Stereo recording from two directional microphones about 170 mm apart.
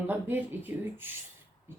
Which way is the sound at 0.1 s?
10° right (ahead or behind).